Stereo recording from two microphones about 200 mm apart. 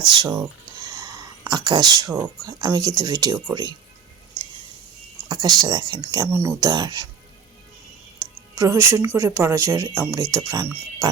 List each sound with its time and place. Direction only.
0.2 s speech: 20° right (ahead or behind)
1.5 s speech: 20° right (ahead or behind)
5.3 s speech: 20° right (ahead or behind)
8.2 s music: 15° right (ahead or behind)
9.1 s speech: 15° right (ahead or behind)